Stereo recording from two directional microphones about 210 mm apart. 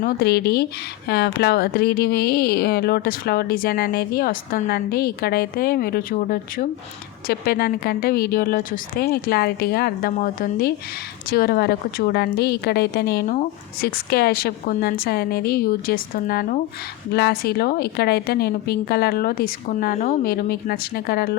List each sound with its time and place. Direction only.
0.0 s speech: 50° left (ahead or behind)